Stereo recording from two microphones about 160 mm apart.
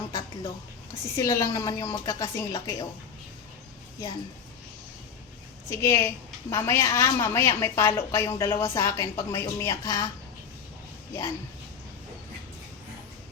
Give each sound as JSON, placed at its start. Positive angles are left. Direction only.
{"t": 0.1, "sound": "a sound", "side_deg": 25}
{"t": 1.0, "sound": "a woman's voice", "side_deg": 20}
{"t": 5.6, "sound": "a woman's voice", "side_deg": 15}